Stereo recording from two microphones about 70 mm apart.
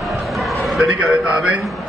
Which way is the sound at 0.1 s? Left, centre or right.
Centre.